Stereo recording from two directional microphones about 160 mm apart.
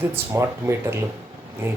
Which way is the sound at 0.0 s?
15° right (ahead or behind).